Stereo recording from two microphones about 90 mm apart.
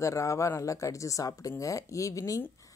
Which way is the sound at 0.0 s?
35° left (ahead or behind).